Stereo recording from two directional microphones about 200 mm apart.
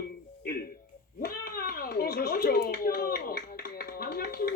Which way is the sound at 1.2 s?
50° left (ahead or behind).